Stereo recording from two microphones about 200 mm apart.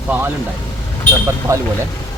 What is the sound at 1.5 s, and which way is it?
Speech, 15° right (ahead or behind).